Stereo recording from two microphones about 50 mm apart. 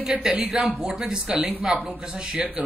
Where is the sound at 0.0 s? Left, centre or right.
Centre.